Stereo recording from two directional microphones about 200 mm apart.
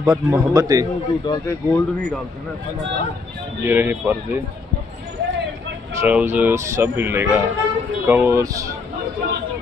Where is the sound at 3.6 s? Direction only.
10° right (ahead or behind).